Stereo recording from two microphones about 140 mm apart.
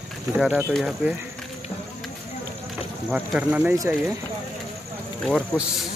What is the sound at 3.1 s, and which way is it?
Speech, 10° right (ahead or behind).